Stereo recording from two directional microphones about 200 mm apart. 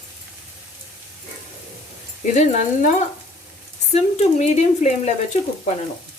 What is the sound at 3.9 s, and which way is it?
Speech, 35° left (ahead or behind).